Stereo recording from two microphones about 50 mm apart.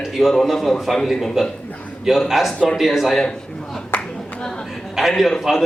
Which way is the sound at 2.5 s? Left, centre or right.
Left.